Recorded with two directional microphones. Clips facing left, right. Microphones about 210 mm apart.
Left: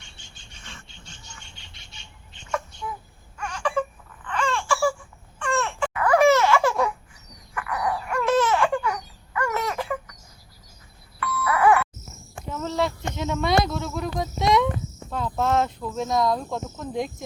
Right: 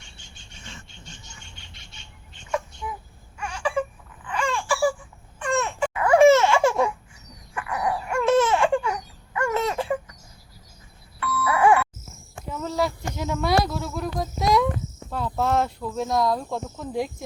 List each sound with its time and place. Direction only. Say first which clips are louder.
3.3 s baby cry: even; 5° right (ahead or behind)
5.4 s baby laughter: right 1 dB; 20° right (ahead or behind)
7.5 s laughter: right 1 dB; 25° right (ahead or behind)
11.4 s music: even; 25° right (ahead or behind)
12.5 s a sound: even; centre (ahead or behind)
15.1 s cricket: even; 5° right (ahead or behind)
16.8 s speech: right 1 dB; 10° right (ahead or behind)